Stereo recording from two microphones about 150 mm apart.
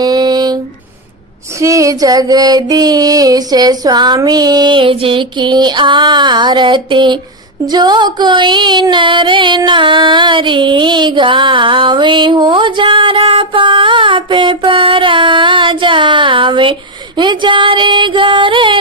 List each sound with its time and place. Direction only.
0.0 s a sound: 25° right (ahead or behind)
1.5 s female singing: 20° right (ahead or behind)
7.7 s music: 30° right (ahead or behind)